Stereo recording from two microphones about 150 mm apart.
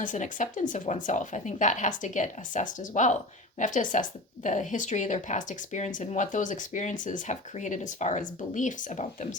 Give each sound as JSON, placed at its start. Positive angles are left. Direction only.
{"t": 0.0, "sound": "speech", "side_deg": 55}